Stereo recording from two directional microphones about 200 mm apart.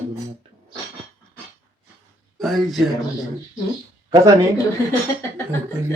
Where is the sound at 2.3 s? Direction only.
Centre (ahead or behind).